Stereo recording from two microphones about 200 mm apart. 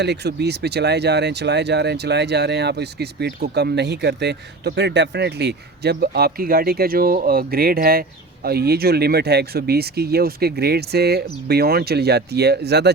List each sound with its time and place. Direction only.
0.0 s speech: 55° right (ahead or behind)